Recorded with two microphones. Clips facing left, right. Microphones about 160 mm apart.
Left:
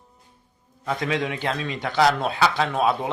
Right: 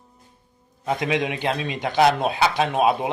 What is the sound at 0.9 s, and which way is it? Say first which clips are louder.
A man's voice: right 2 dB; 20° right (ahead or behind).